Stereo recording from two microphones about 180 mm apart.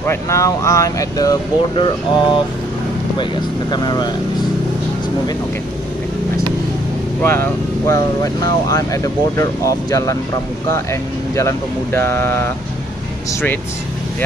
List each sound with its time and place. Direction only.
0.0 s speech: 15° left (ahead or behind)
3.7 s speech: 25° left (ahead or behind)
7.2 s speech: 15° left (ahead or behind)